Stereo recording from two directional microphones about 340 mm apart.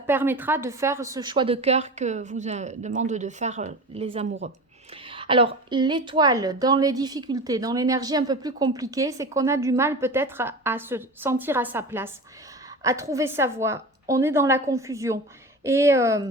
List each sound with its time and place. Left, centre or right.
0.1 s a woman's voice: centre